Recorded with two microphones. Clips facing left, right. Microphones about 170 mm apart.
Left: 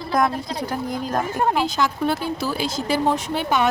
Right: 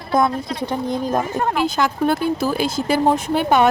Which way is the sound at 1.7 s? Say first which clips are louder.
Right 3 dB; 55° right (ahead or behind).